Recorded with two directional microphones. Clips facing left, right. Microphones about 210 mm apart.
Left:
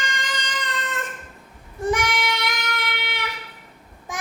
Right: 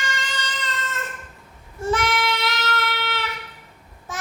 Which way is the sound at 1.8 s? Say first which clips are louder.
Even; 15° left (ahead or behind).